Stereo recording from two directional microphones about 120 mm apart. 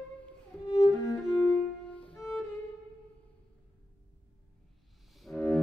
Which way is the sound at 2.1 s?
Centre (ahead or behind).